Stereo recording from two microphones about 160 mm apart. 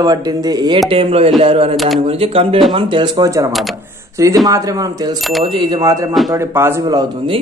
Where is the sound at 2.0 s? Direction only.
35° right (ahead or behind).